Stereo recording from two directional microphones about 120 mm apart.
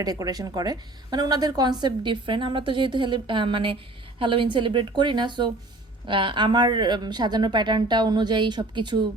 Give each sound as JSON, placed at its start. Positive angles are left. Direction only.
{"t": 0.0, "sound": "a woman's voice", "side_deg": -30}